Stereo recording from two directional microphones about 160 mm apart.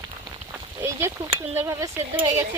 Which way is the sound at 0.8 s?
15° right (ahead or behind).